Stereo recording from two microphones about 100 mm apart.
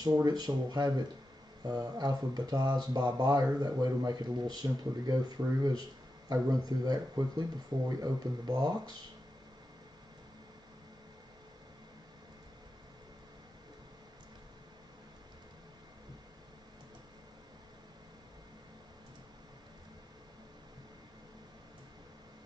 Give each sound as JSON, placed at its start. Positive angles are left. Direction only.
{"t": 0.0, "sound": "speech", "side_deg": -40}